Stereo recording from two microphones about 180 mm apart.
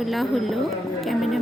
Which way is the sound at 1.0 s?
Centre (ahead or behind).